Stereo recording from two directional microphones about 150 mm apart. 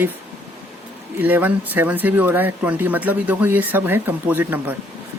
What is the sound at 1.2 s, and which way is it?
Speech, 10° right (ahead or behind).